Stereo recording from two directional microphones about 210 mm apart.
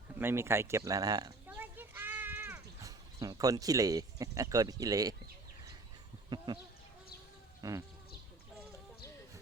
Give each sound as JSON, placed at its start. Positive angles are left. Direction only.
{"t": 0.1, "sound": "speech", "side_deg": -10}
{"t": 1.5, "sound": "cat", "side_deg": -10}
{"t": 6.3, "sound": "speech", "side_deg": -20}
{"t": 7.6, "sound": "sheep", "side_deg": -15}